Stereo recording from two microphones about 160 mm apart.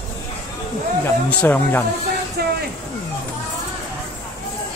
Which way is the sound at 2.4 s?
90° right.